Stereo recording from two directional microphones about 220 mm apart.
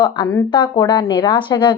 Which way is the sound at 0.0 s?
20° left (ahead or behind).